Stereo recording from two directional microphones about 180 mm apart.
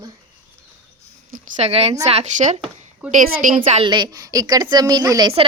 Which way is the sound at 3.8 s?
25° right (ahead or behind).